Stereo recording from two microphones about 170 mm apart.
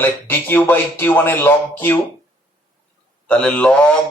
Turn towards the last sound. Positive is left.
turn(degrees=5)  # may be behind; listen again after turning